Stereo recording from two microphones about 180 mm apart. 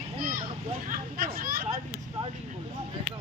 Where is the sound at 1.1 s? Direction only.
55° right (ahead or behind).